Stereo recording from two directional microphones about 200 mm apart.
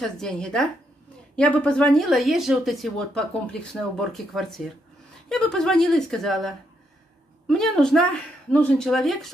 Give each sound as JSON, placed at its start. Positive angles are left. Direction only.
{"t": 0.0, "sound": "speech", "side_deg": 5}